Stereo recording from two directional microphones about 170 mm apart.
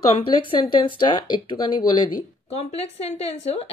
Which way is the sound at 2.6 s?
40° left (ahead or behind).